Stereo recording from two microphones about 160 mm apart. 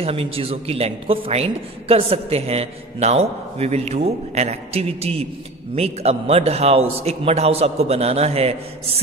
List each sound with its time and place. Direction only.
0.0 s a woman's voice: 35° right (ahead or behind)